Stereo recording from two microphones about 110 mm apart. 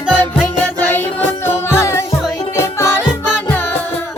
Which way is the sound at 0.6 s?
20° left (ahead or behind).